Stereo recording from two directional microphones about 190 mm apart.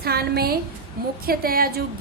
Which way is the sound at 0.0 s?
55° right (ahead or behind).